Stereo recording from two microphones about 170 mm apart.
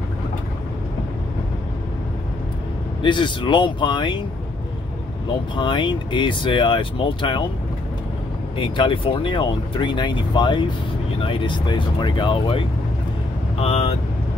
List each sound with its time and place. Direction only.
3.0 s speech: 30° left (ahead or behind)
5.6 s speech: 30° left (ahead or behind)
8.5 s speech: 30° left (ahead or behind)